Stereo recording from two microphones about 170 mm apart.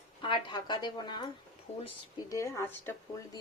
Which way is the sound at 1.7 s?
40° left (ahead or behind).